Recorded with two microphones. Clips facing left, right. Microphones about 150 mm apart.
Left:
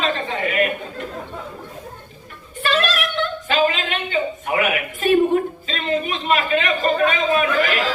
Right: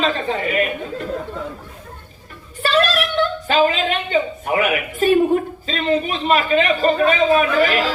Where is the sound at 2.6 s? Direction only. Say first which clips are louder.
Right 3 dB; 40° right (ahead or behind).